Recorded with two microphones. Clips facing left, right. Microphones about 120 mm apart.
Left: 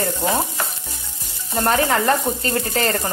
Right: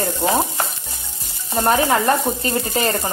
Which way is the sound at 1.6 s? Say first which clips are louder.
Right 2 dB; 15° right (ahead or behind).